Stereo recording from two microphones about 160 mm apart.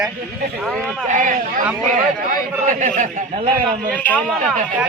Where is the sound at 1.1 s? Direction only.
50° right (ahead or behind).